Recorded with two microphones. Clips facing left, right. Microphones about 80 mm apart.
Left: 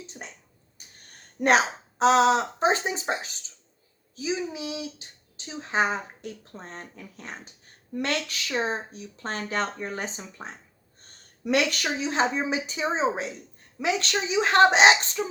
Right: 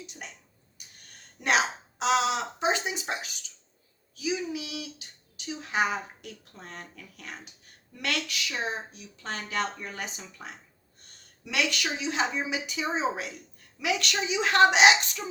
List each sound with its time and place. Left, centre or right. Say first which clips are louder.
0.0 s speech: left 2 dB; left
0.8 s a sound: left 1 dB; left
1.1 s speech: left 5 dB; left
11.0 s a woman's voice: left 14 dB; left